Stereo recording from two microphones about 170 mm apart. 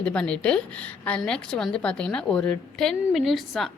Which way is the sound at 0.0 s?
5° left (ahead or behind).